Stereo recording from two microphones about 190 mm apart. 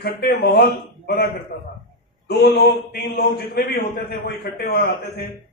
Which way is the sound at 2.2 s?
60° left (ahead or behind).